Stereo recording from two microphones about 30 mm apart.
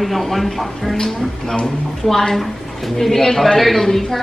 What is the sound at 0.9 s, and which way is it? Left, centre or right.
A man's voice, centre.